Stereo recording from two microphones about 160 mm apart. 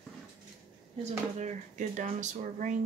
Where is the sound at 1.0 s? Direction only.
45° right (ahead or behind).